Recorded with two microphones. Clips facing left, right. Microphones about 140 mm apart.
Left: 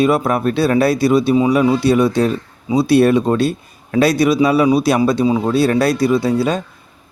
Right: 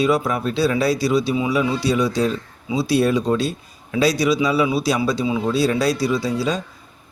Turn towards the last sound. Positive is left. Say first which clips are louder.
# left 6 dB
turn(degrees=55)  # may be behind; listen again after turning